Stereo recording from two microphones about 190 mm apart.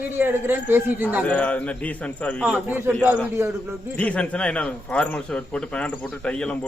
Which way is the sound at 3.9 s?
5° left (ahead or behind).